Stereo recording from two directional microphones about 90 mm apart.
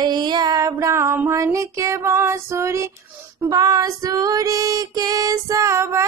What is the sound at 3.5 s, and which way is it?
Female singing, 45° right (ahead or behind).